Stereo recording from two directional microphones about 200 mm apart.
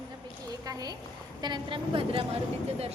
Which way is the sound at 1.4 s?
25° right (ahead or behind).